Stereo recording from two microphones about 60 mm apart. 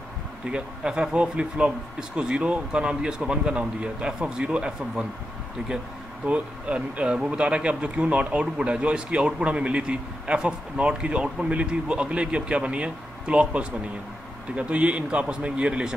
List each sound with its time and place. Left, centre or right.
0.5 s speech: centre
6.2 s speech: right